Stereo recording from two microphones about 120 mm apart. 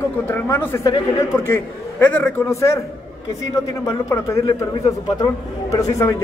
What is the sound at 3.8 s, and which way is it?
Speech, 25° left (ahead or behind).